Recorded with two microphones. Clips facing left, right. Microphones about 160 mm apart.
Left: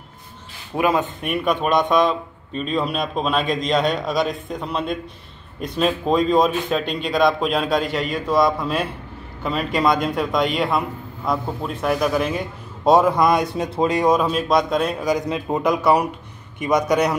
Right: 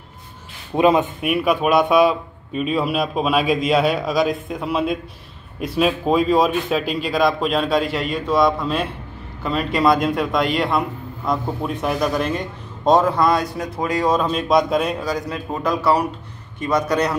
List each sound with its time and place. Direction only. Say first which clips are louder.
0.7 s speech: right 4 dB; 25° right (ahead or behind)
1.2 s a man's voice: right 3 dB; 5° right (ahead or behind); by 14.1 s 25° left (ahead or behind)
14.1 s a man's voice: right 1 dB; 5° left (ahead or behind)
15.0 s a man's voice: left 3 dB; 15° left (ahead or behind)